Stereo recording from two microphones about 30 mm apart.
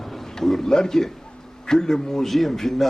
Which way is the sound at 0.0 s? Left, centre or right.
Centre.